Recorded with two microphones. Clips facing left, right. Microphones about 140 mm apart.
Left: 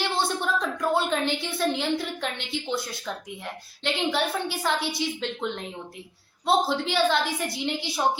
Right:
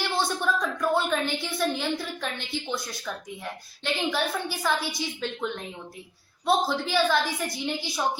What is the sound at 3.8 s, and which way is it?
A woman's voice, 25° left (ahead or behind).